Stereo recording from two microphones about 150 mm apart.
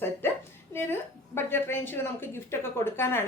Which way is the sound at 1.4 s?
15° left (ahead or behind).